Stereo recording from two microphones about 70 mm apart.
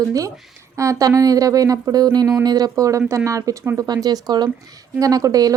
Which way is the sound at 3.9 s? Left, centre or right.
Right.